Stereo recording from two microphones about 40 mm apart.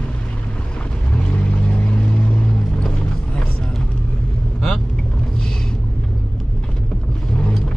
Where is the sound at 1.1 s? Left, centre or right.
Left.